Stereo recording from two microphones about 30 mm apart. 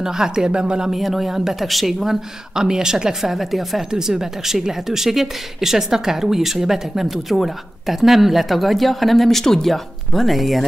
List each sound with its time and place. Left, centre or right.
0.0 s speech: centre
0.9 s speech: centre
2.5 s speech: right
3.2 s speech: centre
3.9 s speech: centre
10.2 s speech: centre